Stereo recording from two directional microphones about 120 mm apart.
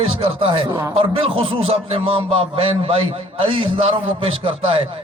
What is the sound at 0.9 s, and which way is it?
A man's voice, 45° right (ahead or behind).